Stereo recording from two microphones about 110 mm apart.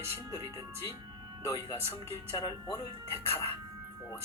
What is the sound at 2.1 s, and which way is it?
Speech, 35° left (ahead or behind).